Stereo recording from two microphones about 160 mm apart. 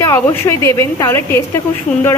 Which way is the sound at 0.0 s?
15° left (ahead or behind).